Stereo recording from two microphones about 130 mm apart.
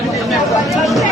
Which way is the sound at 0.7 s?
Centre (ahead or behind).